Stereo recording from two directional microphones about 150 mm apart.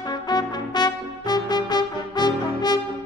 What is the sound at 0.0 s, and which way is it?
Music, 25° left (ahead or behind).